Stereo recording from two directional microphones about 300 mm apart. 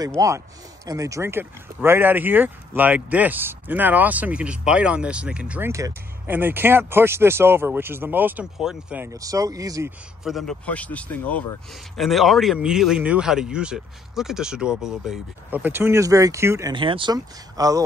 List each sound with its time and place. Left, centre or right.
0.2 s speech: centre